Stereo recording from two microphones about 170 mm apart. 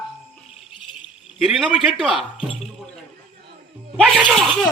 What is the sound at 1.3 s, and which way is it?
Speech, centre (ahead or behind).